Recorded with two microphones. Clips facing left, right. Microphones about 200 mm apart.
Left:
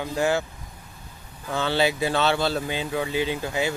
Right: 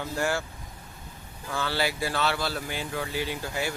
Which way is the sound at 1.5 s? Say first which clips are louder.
Left 6 dB; 20° left (ahead or behind).